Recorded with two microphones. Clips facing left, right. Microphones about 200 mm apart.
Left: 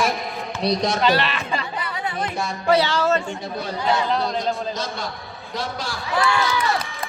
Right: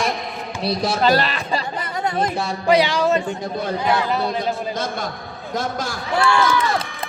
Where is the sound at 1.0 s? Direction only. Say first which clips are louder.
Right 2 dB; 40° right (ahead or behind).